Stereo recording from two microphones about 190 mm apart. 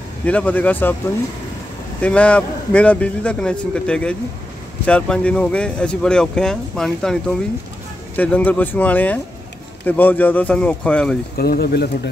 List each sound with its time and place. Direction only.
0.2 s a man's voice: 5° left (ahead or behind)
2.0 s a man's voice: 5° left (ahead or behind)
11.3 s speech: 55° left (ahead or behind)